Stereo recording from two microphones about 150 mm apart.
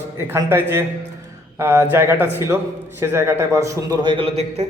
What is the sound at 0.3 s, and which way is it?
A man's voice, 15° right (ahead or behind).